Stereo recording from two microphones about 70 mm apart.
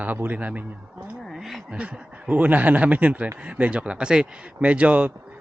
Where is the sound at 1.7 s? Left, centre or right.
Centre.